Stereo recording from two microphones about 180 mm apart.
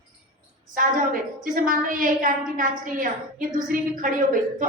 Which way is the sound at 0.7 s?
50° right (ahead or behind).